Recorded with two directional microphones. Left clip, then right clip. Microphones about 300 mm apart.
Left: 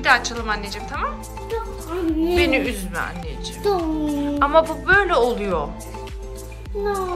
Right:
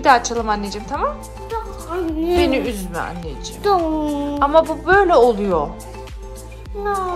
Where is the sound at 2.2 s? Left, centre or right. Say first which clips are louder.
Right 2 dB; centre.